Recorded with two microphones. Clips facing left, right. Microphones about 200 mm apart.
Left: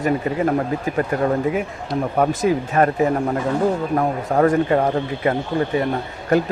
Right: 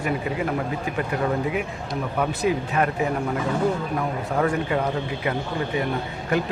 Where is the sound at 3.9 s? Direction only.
45° left (ahead or behind).